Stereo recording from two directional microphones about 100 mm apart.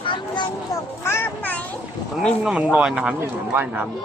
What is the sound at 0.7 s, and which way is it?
Speech, 25° left (ahead or behind).